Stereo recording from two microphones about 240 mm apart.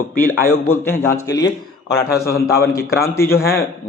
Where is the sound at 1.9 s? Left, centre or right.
Left.